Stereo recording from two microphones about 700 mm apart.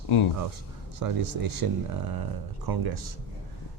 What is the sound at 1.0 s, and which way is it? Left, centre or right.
Speech, right.